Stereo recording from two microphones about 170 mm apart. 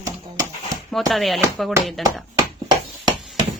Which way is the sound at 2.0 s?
20° right (ahead or behind).